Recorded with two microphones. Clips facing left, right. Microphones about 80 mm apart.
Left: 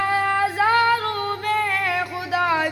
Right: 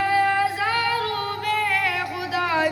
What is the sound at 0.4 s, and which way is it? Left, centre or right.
Music, left.